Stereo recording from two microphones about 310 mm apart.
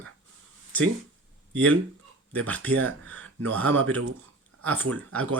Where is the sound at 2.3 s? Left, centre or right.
Centre.